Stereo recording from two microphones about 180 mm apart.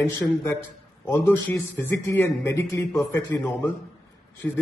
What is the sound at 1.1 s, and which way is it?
A man's voice, 10° left (ahead or behind).